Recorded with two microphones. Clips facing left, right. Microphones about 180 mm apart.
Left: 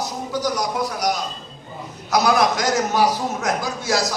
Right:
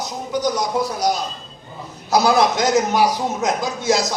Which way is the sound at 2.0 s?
30° right (ahead or behind).